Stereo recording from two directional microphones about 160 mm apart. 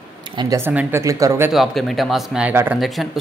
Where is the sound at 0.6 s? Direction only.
15° right (ahead or behind).